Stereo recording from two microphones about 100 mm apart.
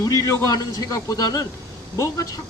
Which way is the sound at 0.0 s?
35° left (ahead or behind).